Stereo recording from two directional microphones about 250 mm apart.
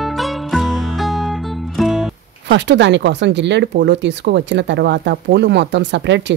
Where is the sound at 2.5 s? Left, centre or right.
Right.